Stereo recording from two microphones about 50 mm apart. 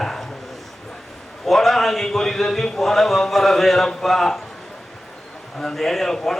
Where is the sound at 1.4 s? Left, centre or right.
Centre.